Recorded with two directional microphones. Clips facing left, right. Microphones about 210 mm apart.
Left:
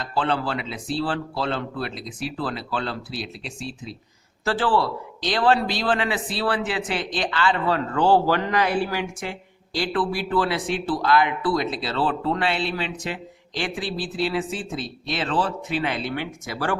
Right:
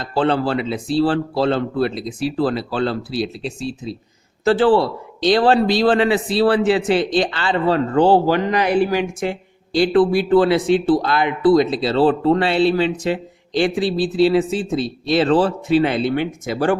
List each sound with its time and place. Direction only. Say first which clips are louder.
0.0 s a man's voice: right 7 dB; 30° right (ahead or behind)
4.4 s a man's voice: right 8 dB; 25° right (ahead or behind)